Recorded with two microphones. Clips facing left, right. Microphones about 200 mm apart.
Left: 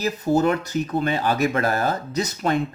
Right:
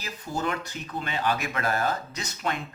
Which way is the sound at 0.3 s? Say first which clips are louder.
Left 8 dB; 40° left (ahead or behind).